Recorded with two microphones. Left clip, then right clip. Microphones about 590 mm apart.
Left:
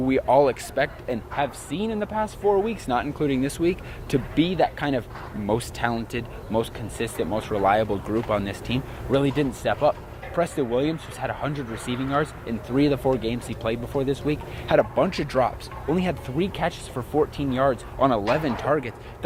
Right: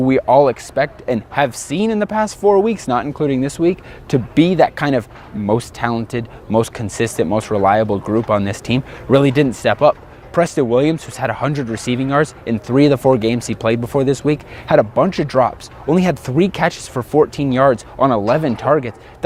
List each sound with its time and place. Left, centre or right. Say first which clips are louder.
0.0 s speech: right 7 dB; right